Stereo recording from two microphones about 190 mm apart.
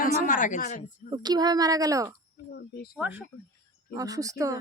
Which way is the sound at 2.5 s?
55° left (ahead or behind).